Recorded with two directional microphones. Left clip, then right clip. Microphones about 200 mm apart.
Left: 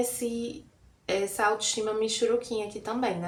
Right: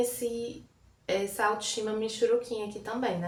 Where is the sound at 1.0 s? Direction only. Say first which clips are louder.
Left 2 dB; 25° left (ahead or behind).